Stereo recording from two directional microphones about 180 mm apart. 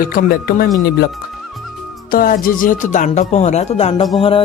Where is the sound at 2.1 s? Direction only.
50° left (ahead or behind).